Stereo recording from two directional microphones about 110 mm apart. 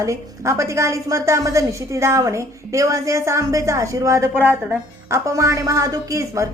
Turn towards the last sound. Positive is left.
turn(degrees=-30)  # may be behind; listen again after turning